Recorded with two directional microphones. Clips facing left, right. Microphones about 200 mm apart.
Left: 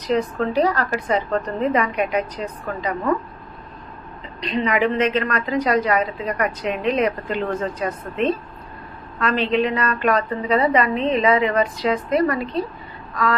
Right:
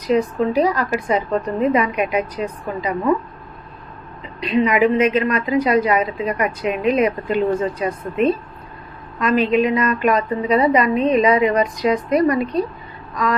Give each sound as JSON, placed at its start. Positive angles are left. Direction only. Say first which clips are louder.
{"t": 0.1, "sound": "a woman's voice", "louder": "right 3 dB", "side_deg": -10}
{"t": 4.4, "sound": "a woman's voice", "louder": "right 4 dB", "side_deg": -10}
{"t": 10.6, "sound": "a woman's voice", "louder": "right 2 dB", "side_deg": 30}
{"t": 10.8, "sound": "a woman's voice", "louder": "right 3 dB", "side_deg": -15}